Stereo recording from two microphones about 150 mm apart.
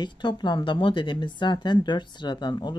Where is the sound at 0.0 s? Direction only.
30° left (ahead or behind).